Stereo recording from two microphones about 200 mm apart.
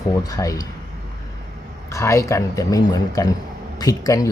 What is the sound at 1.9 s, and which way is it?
Speech, 15° left (ahead or behind).